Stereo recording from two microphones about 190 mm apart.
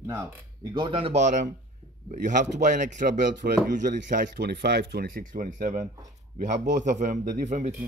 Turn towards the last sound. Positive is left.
turn(degrees=-40)  # may be behind; listen again after turning